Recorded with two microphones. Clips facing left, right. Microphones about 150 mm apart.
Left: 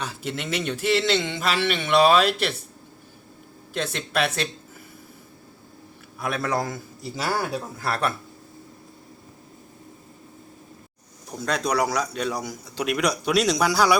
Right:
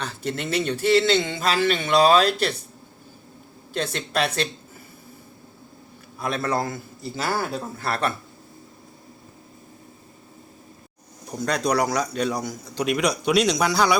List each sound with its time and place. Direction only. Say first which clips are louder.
0.0 s a man's voice: even; 10° left (ahead or behind)
0.3 s speech: right 4 dB; 35° right (ahead or behind)
0.9 s a man's voice: right 3 dB; 5° left (ahead or behind)
3.8 s a man's voice: right 1 dB; centre (ahead or behind)
6.1 s a man's voice: right 1 dB; 10° left (ahead or behind)
11.3 s a man's voice: right 2 dB; centre (ahead or behind)